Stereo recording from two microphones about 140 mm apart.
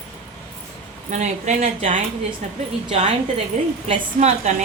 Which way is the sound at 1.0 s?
60° right (ahead or behind).